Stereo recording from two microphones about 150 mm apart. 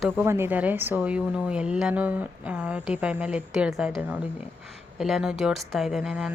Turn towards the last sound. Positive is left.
turn(degrees=-5)  # may be behind; listen again after turning